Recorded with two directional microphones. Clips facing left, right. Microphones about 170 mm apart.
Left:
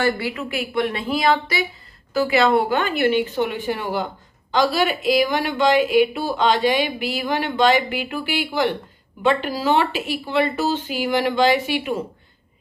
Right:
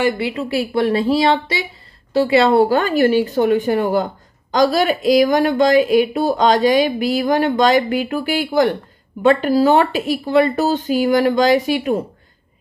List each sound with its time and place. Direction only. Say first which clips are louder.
0.0 s speech: right 3 dB; 25° right (ahead or behind); by 12.0 s 40° right (ahead or behind)